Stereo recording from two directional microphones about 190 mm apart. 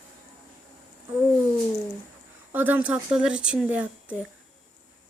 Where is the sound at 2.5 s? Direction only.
10° right (ahead or behind).